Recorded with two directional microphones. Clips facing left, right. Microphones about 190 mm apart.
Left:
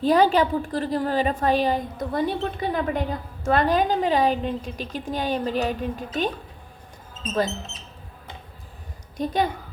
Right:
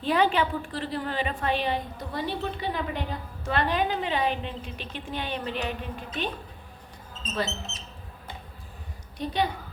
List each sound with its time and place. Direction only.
0.0 s a woman's voice: 40° left (ahead or behind)
9.1 s a woman's voice: 45° left (ahead or behind)